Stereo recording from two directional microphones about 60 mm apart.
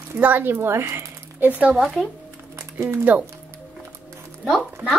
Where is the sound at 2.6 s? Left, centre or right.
Right.